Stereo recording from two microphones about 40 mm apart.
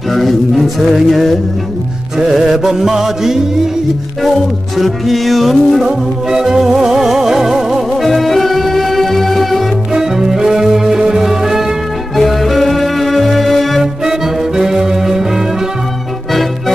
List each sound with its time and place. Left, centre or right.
0.1 s a sound: centre
2.1 s music: centre
4.7 s a sound: centre
5.9 s music: centre
8.0 s music: centre
9.9 s music: centre
12.2 s music: centre
14.0 s music: centre